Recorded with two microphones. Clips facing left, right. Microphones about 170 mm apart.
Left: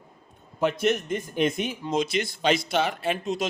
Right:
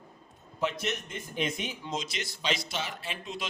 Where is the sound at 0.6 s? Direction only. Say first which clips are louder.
Left 8 dB; 55° left (ahead or behind).